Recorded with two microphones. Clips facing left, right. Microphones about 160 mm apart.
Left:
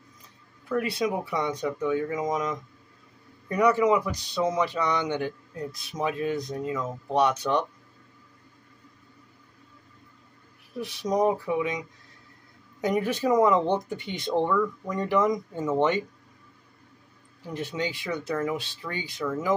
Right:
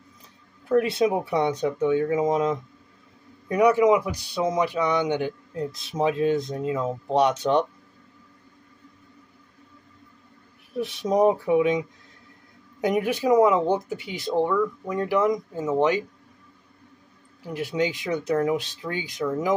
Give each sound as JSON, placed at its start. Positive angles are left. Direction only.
{"t": 0.7, "sound": "speech", "side_deg": -25}
{"t": 3.4, "sound": "speech", "side_deg": -15}
{"t": 10.8, "sound": "speech", "side_deg": -25}
{"t": 12.8, "sound": "speech", "side_deg": -15}
{"t": 17.5, "sound": "speech", "side_deg": -10}